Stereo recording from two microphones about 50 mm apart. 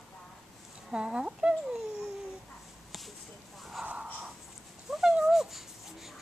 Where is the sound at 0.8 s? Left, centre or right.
Centre.